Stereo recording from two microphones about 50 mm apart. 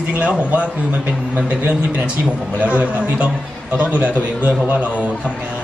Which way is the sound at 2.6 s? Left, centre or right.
Right.